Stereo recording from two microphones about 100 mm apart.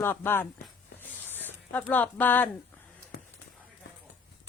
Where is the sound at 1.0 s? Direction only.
20° left (ahead or behind).